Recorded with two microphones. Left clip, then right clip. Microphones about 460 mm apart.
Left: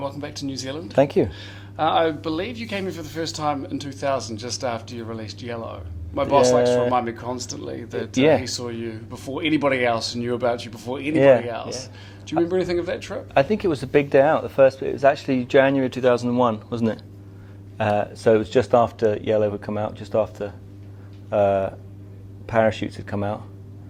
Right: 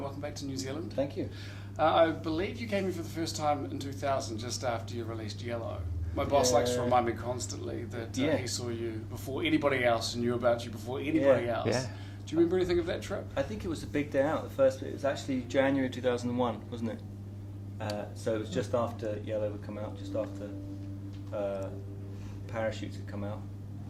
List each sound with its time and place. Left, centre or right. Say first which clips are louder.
0.0 s speech: left 9 dB; left
17.7 s speech: left 16 dB; left
21.3 s speech: left 15 dB; left